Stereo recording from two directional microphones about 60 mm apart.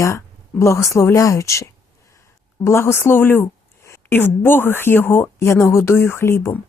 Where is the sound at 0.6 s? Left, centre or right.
Left.